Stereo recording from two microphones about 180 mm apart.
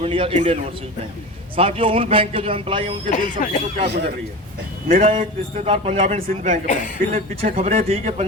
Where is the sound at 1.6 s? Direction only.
30° right (ahead or behind).